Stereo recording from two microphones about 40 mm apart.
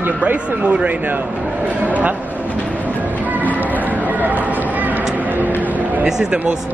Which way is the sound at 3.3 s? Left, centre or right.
Right.